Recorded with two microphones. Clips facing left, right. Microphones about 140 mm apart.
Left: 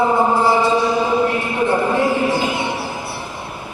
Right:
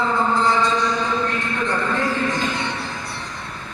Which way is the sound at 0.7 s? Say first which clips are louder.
Left 6 dB; 10° left (ahead or behind).